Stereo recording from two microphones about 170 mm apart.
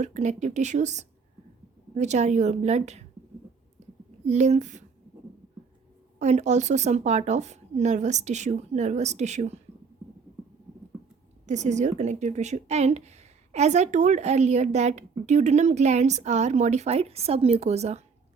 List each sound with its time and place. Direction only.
0.0 s speech: 45° right (ahead or behind)
3.8 s a sound: 45° right (ahead or behind)
4.3 s speech: 40° right (ahead or behind)
6.1 s speech: 40° right (ahead or behind)
11.4 s a woman's voice: 45° right (ahead or behind)